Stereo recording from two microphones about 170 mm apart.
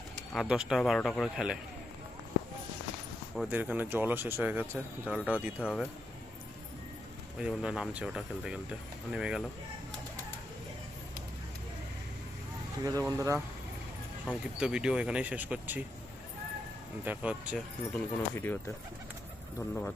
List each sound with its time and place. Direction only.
0.3 s speech: 5° right (ahead or behind)
3.3 s speech: 5° right (ahead or behind)
7.3 s speech: 5° right (ahead or behind)
13.1 s speech: 20° right (ahead or behind)
14.6 s speech: 5° right (ahead or behind)
17.1 s speech: 5° right (ahead or behind)
17.9 s speech: 10° left (ahead or behind)
19.5 s speech: 10° left (ahead or behind)